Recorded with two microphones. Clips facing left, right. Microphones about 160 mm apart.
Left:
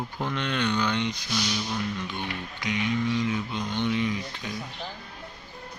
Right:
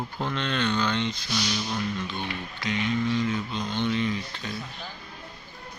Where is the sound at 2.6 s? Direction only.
15° left (ahead or behind).